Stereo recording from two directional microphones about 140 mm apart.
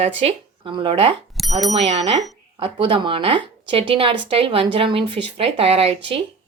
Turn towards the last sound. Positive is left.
turn(degrees=-45)  # may be behind; listen again after turning